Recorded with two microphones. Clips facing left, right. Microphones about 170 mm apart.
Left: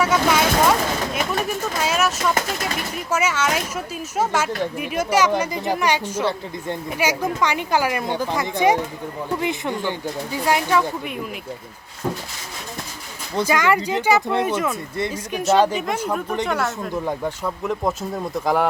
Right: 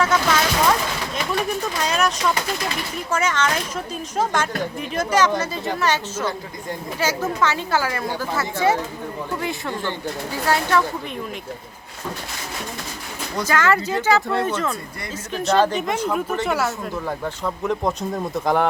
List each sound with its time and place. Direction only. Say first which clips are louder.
0.0 s speech: left 1 dB; 10° left (ahead or behind)
13.4 s speech: left 1 dB; 15° left (ahead or behind)
14.9 s speech: left 5 dB; 25° left (ahead or behind)
15.4 s speech: left 1 dB; 15° left (ahead or behind)
16.5 s speech: right 1 dB; 5° right (ahead or behind)
17.1 s speech: left 1 dB; 10° left (ahead or behind)